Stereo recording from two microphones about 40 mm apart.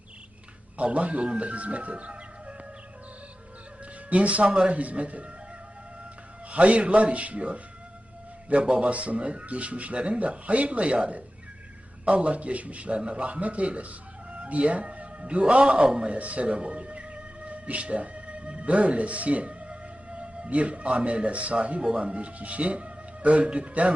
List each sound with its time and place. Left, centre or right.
0.8 s speech: right
4.1 s speech: right
6.5 s speech: right